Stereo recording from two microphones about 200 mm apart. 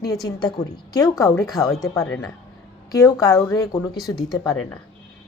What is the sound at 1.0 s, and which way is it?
A woman's voice, 15° left (ahead or behind).